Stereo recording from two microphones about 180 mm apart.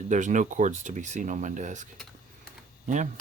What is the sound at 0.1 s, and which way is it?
Speech, 45° right (ahead or behind).